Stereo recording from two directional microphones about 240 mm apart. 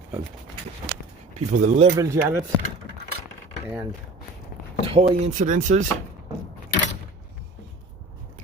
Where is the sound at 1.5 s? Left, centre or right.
Right.